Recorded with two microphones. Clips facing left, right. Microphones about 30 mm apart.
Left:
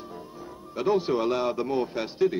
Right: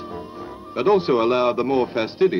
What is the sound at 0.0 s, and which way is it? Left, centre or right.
Speech, right.